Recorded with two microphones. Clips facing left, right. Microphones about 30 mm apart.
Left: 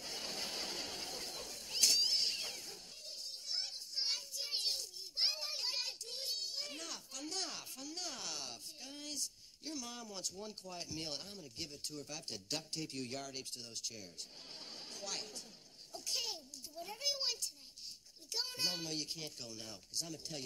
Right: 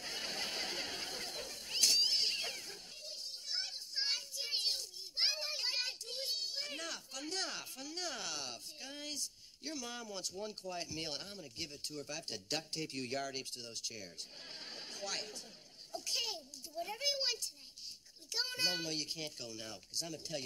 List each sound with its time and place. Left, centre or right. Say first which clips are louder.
0.0 s a sound: right 3 dB; right
9.7 s speech: right 2 dB; right
10.0 s a child's voice: right 3 dB; right